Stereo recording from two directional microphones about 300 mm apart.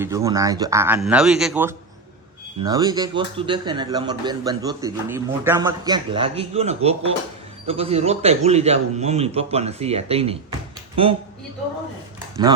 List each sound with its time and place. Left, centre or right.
0.0 s a man's voice: centre
12.4 s speech: centre